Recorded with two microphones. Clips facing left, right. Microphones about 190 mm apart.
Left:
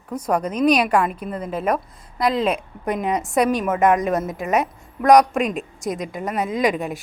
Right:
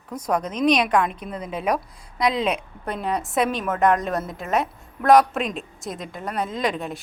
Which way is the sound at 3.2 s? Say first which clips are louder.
Left 3 dB; centre (ahead or behind).